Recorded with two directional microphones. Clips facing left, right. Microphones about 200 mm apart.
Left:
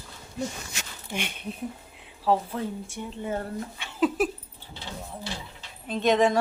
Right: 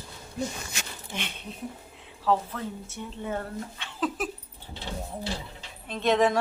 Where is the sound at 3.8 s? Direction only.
10° left (ahead or behind).